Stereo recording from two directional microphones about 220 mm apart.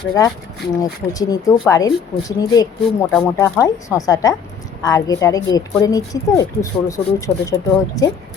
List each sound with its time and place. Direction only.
0.2 s speech: 15° left (ahead or behind)